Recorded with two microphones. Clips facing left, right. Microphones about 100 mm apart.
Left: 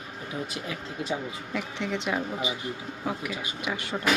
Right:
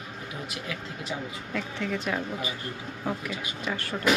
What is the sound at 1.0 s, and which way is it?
Speech, 25° left (ahead or behind).